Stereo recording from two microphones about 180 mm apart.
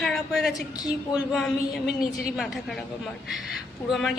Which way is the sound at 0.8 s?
20° left (ahead or behind).